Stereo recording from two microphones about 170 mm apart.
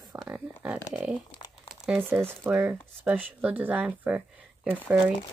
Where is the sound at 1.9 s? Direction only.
10° right (ahead or behind).